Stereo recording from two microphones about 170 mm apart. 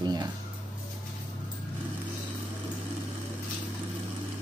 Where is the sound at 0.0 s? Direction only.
25° right (ahead or behind).